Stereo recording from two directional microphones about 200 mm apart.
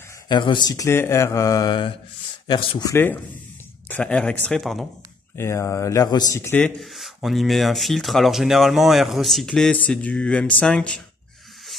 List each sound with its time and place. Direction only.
0.3 s speech: 25° left (ahead or behind)
2.9 s a man's voice: 10° left (ahead or behind)
5.4 s a man's voice: 15° left (ahead or behind)